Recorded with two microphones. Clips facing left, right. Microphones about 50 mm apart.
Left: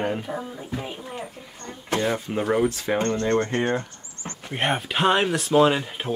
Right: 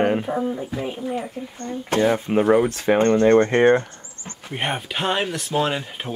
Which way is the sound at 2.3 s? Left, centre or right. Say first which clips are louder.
Right 5 dB; right.